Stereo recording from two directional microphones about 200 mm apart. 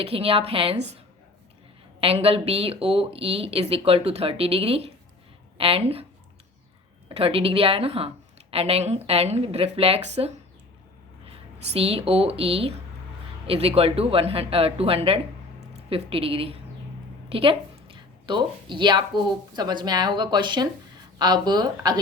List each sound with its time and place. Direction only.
0.0 s a woman's voice: 30° right (ahead or behind)
2.0 s a woman's voice: 30° right (ahead or behind)
7.1 s a woman's voice: 30° right (ahead or behind)
11.7 s a woman's voice: 30° right (ahead or behind)